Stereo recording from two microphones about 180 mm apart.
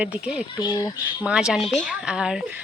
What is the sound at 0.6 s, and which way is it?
Speech, 25° left (ahead or behind).